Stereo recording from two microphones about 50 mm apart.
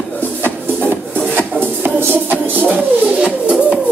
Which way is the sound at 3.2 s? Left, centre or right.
Right.